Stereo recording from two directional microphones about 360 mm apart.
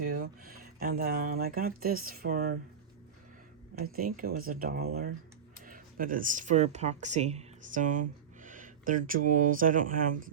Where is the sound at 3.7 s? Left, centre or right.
Right.